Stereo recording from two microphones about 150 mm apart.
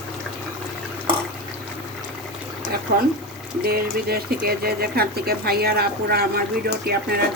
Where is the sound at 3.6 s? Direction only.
90° right.